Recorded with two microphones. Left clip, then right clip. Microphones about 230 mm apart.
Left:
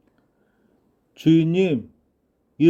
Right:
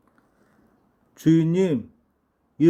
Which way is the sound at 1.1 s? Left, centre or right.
Centre.